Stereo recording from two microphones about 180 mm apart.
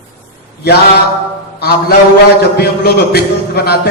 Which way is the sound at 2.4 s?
60° left (ahead or behind).